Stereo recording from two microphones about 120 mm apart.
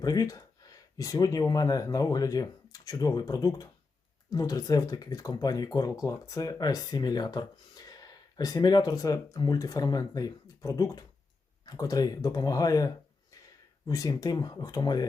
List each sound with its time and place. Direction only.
0.0 s speech: 30° left (ahead or behind)